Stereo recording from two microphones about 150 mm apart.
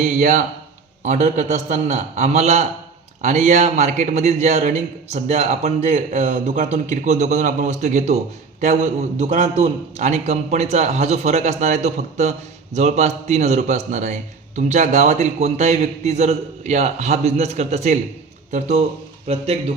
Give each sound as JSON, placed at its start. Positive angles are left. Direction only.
{"t": 0.0, "sound": "a man's voice", "side_deg": -55}
{"t": 19.3, "sound": "a man's voice", "side_deg": -40}